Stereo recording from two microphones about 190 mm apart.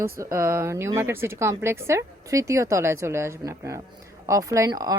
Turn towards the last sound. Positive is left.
turn(degrees=-20)  # may be behind; listen again after turning